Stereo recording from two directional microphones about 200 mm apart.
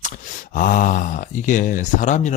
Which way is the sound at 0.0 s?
40° left (ahead or behind).